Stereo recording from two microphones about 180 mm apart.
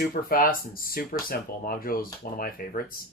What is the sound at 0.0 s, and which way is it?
Speech, 50° left (ahead or behind).